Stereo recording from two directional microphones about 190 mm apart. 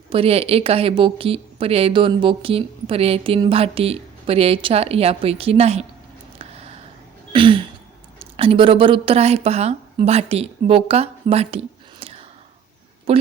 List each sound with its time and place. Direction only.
0.1 s speech: 30° right (ahead or behind)
6.4 s a sound: 30° right (ahead or behind)
7.3 s throat clearing: 25° right (ahead or behind)
8.4 s speech: 30° right (ahead or behind)